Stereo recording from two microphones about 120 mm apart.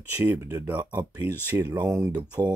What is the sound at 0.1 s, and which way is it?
Speech, 15° right (ahead or behind).